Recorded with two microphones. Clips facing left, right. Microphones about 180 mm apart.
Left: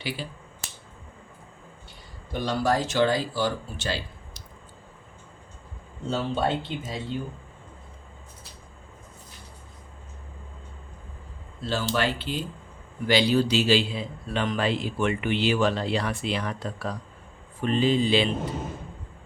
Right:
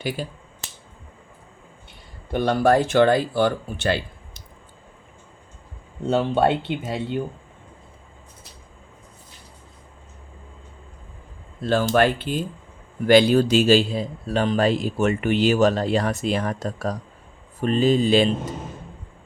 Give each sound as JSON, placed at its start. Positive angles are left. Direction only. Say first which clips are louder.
{"t": 0.2, "sound": "speech", "louder": "right 5 dB", "side_deg": -45}
{"t": 2.3, "sound": "speech", "louder": "right 7 dB", "side_deg": -60}
{"t": 6.1, "sound": "speech", "louder": "right 7 dB", "side_deg": -60}
{"t": 11.6, "sound": "speech", "louder": "right 8 dB", "side_deg": -50}